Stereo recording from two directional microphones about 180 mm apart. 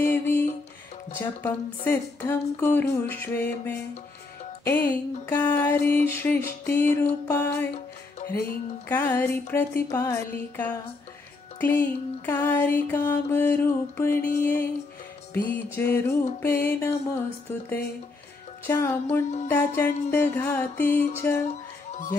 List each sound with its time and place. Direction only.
0.0 s music: 10° left (ahead or behind)
1.1 s speech: 10° left (ahead or behind)
18.7 s speech: 15° left (ahead or behind)
21.5 s music: 40° left (ahead or behind)